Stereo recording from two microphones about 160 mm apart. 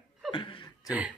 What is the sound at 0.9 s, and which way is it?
Speech, 10° right (ahead or behind).